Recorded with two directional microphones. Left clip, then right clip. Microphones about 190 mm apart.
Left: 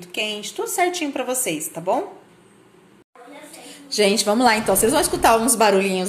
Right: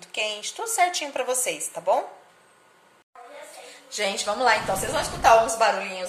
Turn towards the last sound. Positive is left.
turn(degrees=55)  # may be behind; listen again after turning